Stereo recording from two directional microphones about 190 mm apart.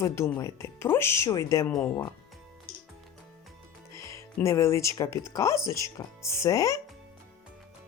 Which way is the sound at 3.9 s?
15° left (ahead or behind).